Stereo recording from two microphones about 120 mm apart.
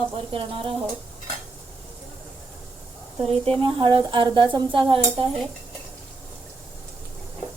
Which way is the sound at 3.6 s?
45° right (ahead or behind).